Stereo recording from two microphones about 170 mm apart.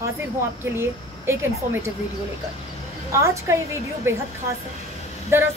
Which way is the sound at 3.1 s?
15° right (ahead or behind).